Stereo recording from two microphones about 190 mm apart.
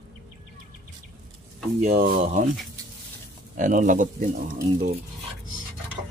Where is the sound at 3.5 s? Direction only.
40° right (ahead or behind).